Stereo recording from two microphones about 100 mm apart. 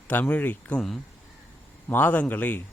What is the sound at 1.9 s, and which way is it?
Speech, 20° left (ahead or behind).